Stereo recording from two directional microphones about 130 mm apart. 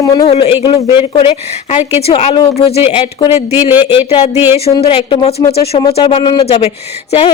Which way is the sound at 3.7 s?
15° right (ahead or behind).